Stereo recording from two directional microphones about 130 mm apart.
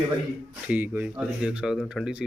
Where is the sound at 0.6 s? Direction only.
10° right (ahead or behind).